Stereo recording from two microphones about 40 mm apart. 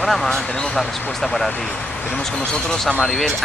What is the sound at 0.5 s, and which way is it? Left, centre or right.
Speech, centre.